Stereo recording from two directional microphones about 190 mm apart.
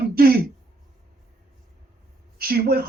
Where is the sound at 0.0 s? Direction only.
55° right (ahead or behind).